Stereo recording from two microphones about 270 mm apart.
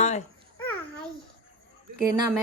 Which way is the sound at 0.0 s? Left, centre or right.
Left.